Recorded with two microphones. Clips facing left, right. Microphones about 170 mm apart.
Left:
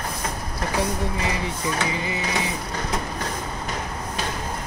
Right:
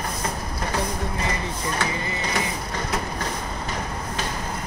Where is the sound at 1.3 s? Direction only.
15° left (ahead or behind).